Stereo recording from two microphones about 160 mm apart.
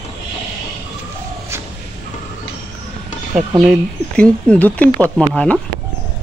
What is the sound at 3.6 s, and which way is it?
Speech, 5° left (ahead or behind).